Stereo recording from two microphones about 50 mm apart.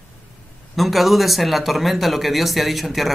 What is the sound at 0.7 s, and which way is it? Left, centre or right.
Speech, centre.